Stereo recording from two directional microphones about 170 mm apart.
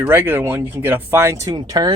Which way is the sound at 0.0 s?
10° right (ahead or behind).